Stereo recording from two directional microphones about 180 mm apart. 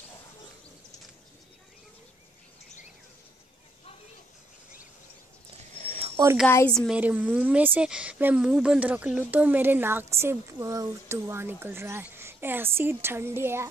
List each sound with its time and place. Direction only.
5.8 s a sound: 40° right (ahead or behind)
6.4 s a woman's voice: 15° left (ahead or behind)
6.7 s a woman's voice: 5° left (ahead or behind)
7.0 s speech: 10° right (ahead or behind)